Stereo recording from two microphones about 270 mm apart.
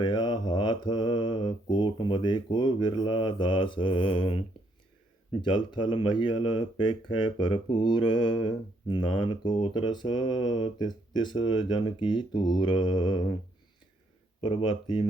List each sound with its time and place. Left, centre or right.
0.0 s mantra: centre
14.4 s mantra: centre